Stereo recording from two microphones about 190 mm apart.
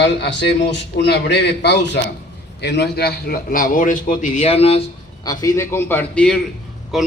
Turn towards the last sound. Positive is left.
turn(degrees=0)  # may be behind; listen again after turning